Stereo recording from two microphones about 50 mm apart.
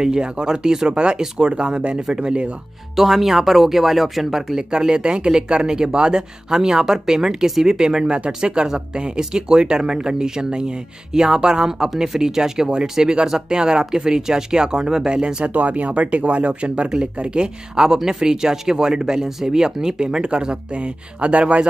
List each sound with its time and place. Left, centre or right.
0.0 s speech: centre
3.0 s speech: centre; by 21.6 s right